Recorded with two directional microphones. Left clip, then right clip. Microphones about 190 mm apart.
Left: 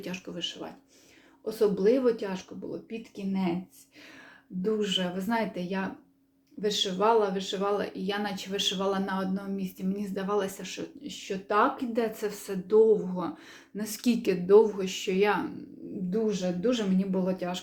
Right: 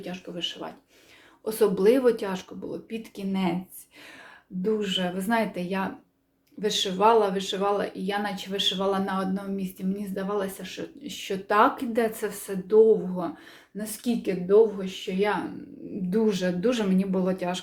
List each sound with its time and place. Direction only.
0.3 s speech: centre (ahead or behind)
1.5 s speech: 10° right (ahead or behind)
4.6 s speech: centre (ahead or behind)
11.0 s speech: 10° right (ahead or behind); by 13.3 s 5° left (ahead or behind)
13.7 s speech: 15° left (ahead or behind)
16.0 s speech: 15° right (ahead or behind)